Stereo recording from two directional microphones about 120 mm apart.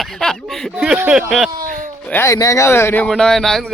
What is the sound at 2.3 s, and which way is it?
Speech, 25° left (ahead or behind).